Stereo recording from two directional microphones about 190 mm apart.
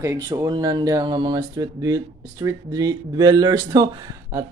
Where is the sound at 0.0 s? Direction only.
20° right (ahead or behind).